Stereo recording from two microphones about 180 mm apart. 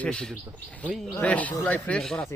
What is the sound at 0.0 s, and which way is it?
A man's voice, 5° left (ahead or behind).